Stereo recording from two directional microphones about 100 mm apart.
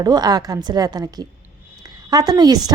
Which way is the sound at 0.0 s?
40° right (ahead or behind).